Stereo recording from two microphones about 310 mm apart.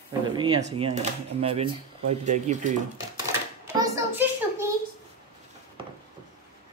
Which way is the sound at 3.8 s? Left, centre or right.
Centre.